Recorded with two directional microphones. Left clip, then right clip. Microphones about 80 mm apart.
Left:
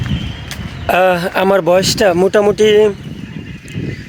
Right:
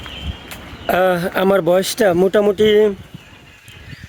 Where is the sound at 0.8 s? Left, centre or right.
Right.